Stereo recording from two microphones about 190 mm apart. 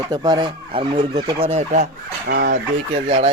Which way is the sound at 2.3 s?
60° right (ahead or behind).